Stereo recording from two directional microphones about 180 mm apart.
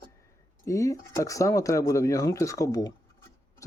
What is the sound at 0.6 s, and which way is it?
Speech, 15° left (ahead or behind).